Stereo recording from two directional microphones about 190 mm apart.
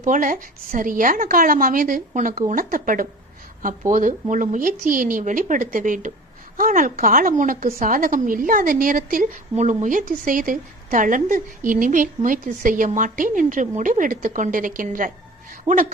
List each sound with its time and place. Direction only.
0.0 s a woman's voice: 45° right (ahead or behind)